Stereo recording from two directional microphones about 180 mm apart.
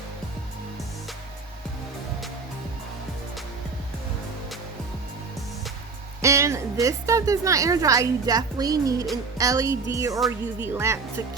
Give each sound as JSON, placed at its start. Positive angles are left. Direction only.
{"t": 6.2, "sound": "a woman's voice", "side_deg": -15}